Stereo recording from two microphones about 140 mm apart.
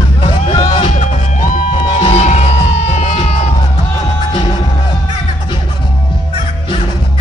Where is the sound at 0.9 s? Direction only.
65° left (ahead or behind).